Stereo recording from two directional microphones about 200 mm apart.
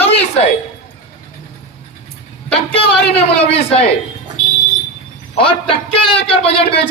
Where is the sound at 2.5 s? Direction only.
30° left (ahead or behind).